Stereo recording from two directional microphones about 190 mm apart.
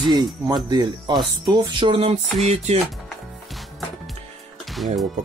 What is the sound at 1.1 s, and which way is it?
Speech, centre (ahead or behind).